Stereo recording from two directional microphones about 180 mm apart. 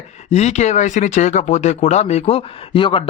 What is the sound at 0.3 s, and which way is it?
Speech, 35° left (ahead or behind).